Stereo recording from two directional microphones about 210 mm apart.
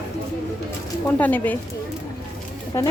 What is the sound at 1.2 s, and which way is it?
Speech, 5° left (ahead or behind).